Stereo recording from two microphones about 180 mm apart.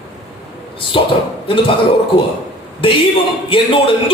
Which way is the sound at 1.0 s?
30° left (ahead or behind).